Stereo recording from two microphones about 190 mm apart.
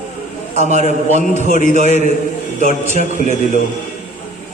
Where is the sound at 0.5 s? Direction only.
35° right (ahead or behind).